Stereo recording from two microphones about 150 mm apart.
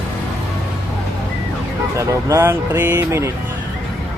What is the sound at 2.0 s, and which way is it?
Speech, 20° right (ahead or behind).